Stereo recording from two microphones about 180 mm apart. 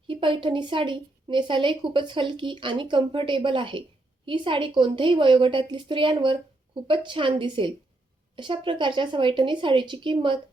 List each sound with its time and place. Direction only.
0.1 s a woman's voice: 30° right (ahead or behind)